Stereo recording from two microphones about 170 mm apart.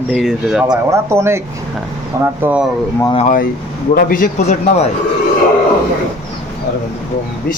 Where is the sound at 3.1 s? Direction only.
50° left (ahead or behind).